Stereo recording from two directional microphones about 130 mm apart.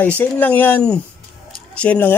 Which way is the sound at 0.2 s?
15° left (ahead or behind).